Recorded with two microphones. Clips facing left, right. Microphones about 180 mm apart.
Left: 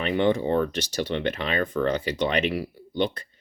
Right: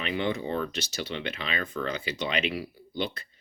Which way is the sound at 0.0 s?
55° left (ahead or behind).